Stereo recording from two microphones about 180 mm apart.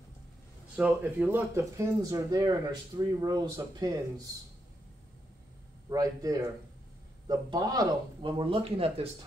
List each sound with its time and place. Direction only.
0.7 s speech: 10° right (ahead or behind)
5.9 s speech: 20° right (ahead or behind)